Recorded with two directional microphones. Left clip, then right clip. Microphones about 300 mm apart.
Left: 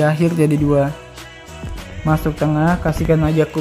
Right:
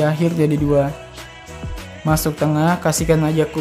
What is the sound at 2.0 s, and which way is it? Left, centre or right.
Speech, centre.